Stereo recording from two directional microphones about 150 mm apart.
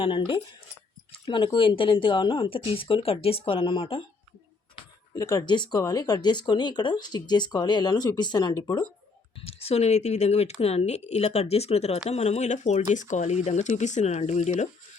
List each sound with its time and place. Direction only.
0.0 s speech: 35° left (ahead or behind)
5.1 s speech: 25° left (ahead or behind)
9.4 s speech: 40° left (ahead or behind)